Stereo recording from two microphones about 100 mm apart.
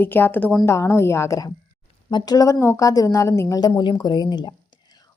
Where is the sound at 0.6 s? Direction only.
30° left (ahead or behind).